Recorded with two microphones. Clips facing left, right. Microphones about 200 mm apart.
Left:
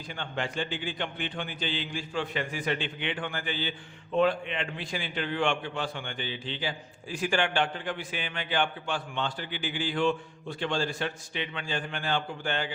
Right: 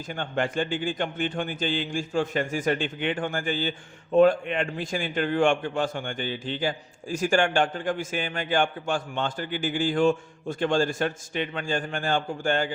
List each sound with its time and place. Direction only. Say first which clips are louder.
0.1 s speech: right 6 dB; 50° right (ahead or behind)